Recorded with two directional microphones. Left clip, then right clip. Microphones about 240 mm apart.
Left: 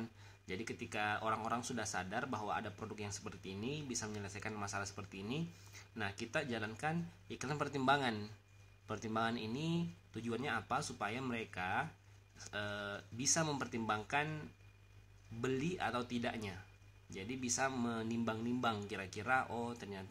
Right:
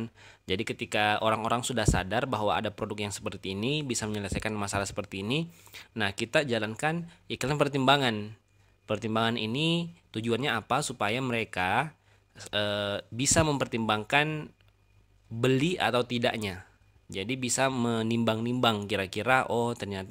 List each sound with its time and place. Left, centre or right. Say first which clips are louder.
0.0 s speech: right 9 dB; right